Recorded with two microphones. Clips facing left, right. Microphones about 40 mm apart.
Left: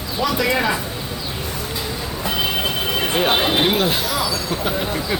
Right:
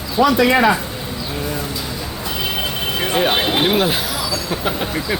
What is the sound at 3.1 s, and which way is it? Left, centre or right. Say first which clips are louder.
Speech: right 1 dB; centre.